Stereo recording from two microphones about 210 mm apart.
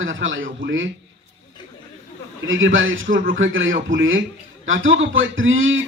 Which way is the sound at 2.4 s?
65° right (ahead or behind).